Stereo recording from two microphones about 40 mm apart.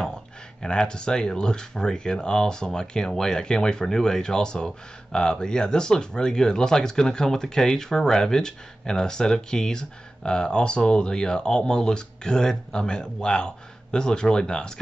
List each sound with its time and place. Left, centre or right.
0.6 s speech: left